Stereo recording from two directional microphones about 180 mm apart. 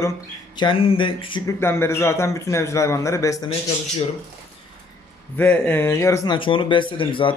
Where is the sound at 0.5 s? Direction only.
30° left (ahead or behind).